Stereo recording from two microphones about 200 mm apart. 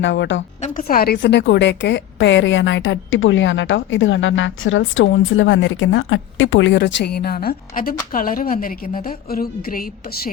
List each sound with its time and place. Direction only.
0.0 s speech: 65° left (ahead or behind)
0.6 s a woman's voice: 45° left (ahead or behind)
1.2 s a woman's voice: 60° left (ahead or behind)